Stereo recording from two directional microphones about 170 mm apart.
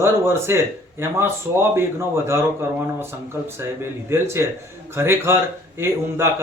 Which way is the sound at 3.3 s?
15° right (ahead or behind).